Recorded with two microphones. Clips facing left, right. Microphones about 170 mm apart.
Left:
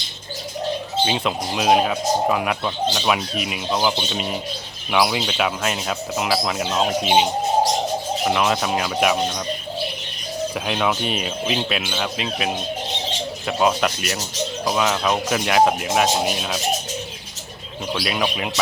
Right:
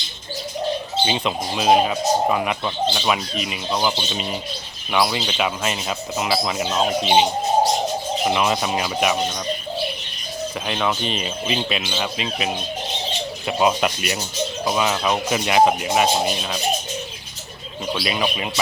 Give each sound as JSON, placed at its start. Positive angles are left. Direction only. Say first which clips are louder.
{"t": 1.0, "sound": "speech", "louder": "left 1 dB", "side_deg": 0}
{"t": 10.7, "sound": "speech", "louder": "even", "side_deg": 5}
{"t": 13.5, "sound": "speech", "louder": "even", "side_deg": -5}
{"t": 17.9, "sound": "speech", "louder": "even", "side_deg": 0}